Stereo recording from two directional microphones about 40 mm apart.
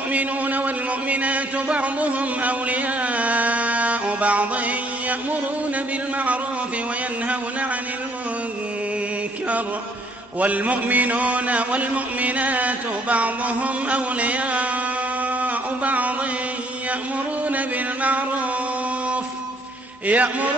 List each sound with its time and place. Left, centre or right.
0.1 s a man's voice: right
10.4 s a man's voice: right
15.4 s a sound: right
17.5 s a man's voice: right
20.1 s a man's voice: right